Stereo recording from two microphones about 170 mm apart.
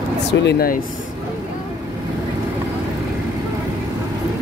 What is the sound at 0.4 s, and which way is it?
Speech, 70° left (ahead or behind).